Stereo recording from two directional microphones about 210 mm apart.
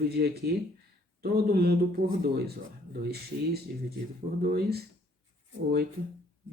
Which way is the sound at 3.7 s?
45° right (ahead or behind).